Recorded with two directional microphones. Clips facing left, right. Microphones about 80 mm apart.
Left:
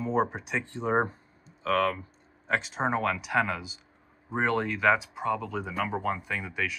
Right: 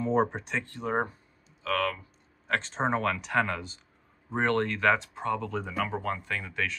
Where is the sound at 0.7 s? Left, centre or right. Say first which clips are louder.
Left 4 dB; left.